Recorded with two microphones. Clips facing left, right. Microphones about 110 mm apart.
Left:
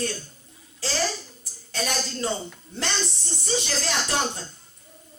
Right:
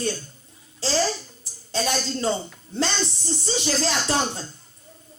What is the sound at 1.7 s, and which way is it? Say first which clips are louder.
Speech: right 4 dB; 30° right (ahead or behind).